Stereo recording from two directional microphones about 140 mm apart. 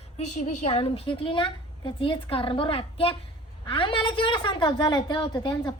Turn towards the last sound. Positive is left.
turn(degrees=30)  # may be behind; listen again after turning